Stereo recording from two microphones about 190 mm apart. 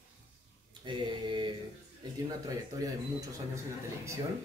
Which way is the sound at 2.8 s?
20° right (ahead or behind).